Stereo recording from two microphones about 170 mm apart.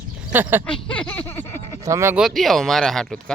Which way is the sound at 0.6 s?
5° left (ahead or behind).